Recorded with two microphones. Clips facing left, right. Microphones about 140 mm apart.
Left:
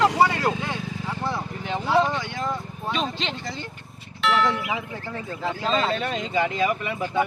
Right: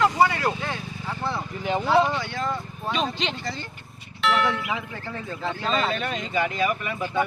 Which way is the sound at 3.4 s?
20° left (ahead or behind).